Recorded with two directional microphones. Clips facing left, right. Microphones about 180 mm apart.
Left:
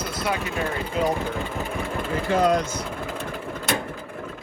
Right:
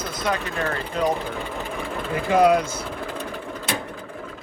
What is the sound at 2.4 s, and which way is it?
Speech, 10° right (ahead or behind).